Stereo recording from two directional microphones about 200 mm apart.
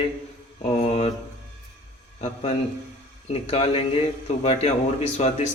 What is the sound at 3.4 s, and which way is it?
Speech, 30° left (ahead or behind).